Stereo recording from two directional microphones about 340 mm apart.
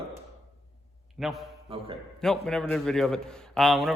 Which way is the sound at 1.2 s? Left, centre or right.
Centre.